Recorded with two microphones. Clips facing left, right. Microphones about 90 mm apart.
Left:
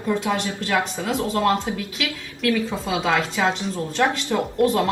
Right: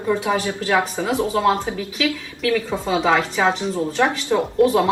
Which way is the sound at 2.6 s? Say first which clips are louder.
Right 4 dB; 30° right (ahead or behind).